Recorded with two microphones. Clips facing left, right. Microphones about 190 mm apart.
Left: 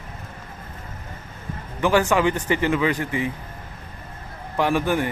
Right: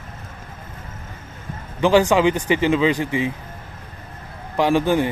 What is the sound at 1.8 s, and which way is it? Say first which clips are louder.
Speech: right 4 dB; 20° right (ahead or behind).